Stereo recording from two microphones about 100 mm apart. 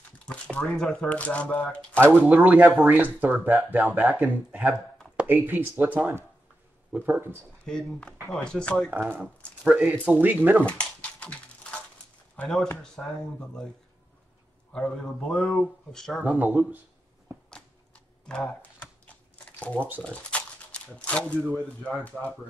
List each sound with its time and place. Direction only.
0.2 s speech: 10° left (ahead or behind)
2.0 s speech: 20° right (ahead or behind)
7.6 s speech: 5° left (ahead or behind)
9.7 s speech: 15° right (ahead or behind)
10.6 s a sound: 10° left (ahead or behind)
13.0 s speech: 15° left (ahead or behind)
14.7 s speech: 10° left (ahead or behind)
16.2 s speech: 15° right (ahead or behind)
18.2 s speech: 5° left (ahead or behind)
19.3 s a sound: 10° left (ahead or behind)
20.0 s speech: 10° left (ahead or behind)